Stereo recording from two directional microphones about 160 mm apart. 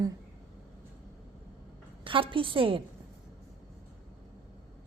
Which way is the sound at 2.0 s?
35° right (ahead or behind).